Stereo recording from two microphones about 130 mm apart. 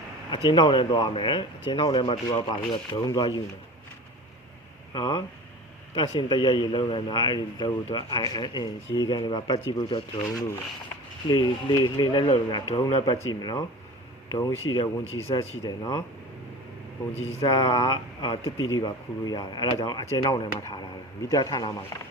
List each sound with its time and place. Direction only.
0.3 s a man's voice: 35° left (ahead or behind)
4.9 s a man's voice: 35° left (ahead or behind)
11.3 s a man's voice: 35° left (ahead or behind)
15.0 s speech: 50° left (ahead or behind)
15.6 s a man's voice: 30° left (ahead or behind)
17.4 s a man's voice: 35° left (ahead or behind)